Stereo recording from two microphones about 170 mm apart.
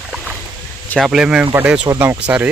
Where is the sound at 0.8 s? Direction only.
5° left (ahead or behind).